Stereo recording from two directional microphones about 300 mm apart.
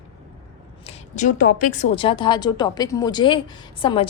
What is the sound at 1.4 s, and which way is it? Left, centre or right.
A woman's voice, left.